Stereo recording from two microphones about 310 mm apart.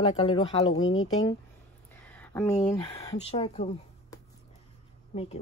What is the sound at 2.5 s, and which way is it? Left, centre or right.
Speech, centre.